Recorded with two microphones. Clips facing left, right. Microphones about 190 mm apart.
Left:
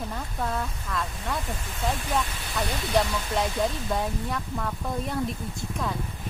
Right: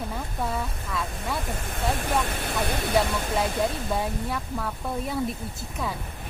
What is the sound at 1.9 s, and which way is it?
Speech, 55° right (ahead or behind).